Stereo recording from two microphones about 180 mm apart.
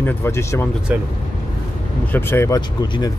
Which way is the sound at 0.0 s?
15° left (ahead or behind).